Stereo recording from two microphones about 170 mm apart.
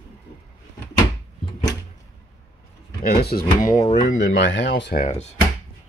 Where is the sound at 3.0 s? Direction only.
70° left (ahead or behind).